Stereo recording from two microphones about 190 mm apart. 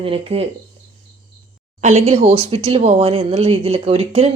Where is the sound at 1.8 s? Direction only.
35° right (ahead or behind).